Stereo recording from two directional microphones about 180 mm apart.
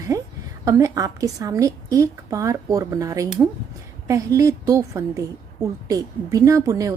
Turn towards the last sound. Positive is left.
turn(degrees=-20)  # may be behind; listen again after turning